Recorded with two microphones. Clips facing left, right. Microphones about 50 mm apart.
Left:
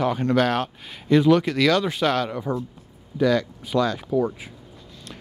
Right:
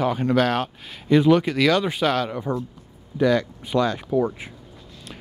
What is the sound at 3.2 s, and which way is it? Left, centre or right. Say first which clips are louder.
Speech: right 1 dB; right.